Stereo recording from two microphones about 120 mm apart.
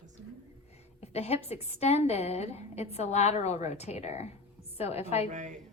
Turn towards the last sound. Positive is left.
turn(degrees=-90)